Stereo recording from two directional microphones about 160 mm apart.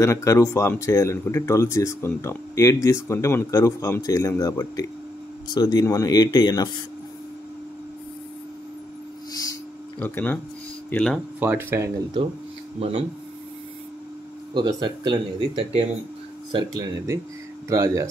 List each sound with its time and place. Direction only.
0.0 s speech: 20° left (ahead or behind)
9.9 s speech: 10° left (ahead or behind)
11.3 s speech: 10° right (ahead or behind)
14.5 s speech: 25° right (ahead or behind)
16.5 s speech: 20° right (ahead or behind)